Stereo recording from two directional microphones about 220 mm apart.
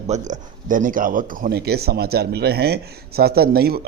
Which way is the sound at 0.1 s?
35° right (ahead or behind).